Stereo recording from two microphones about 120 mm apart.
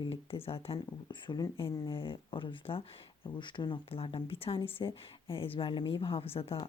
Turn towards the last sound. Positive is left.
turn(degrees=55)  # may be behind; listen again after turning